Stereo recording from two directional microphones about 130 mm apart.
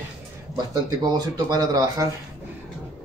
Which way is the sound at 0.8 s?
30° right (ahead or behind).